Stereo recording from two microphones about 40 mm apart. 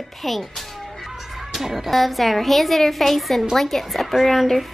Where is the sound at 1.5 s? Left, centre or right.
Centre.